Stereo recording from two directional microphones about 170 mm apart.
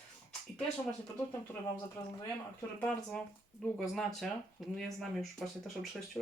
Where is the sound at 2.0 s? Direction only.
15° left (ahead or behind).